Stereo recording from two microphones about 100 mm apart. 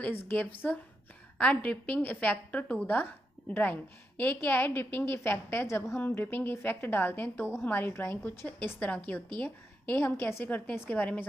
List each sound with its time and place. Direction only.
0.0 s a woman's voice: 20° left (ahead or behind)